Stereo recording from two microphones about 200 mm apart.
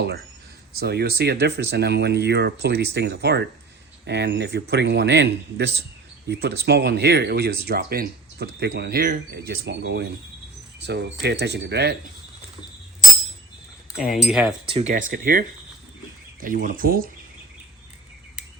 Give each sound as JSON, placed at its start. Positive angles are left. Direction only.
{"t": 0.8, "sound": "speech", "side_deg": -50}
{"t": 14.1, "sound": "speech", "side_deg": 0}
{"t": 14.7, "sound": "speech", "side_deg": -35}